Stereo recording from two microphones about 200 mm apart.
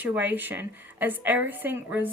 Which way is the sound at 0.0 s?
10° right (ahead or behind).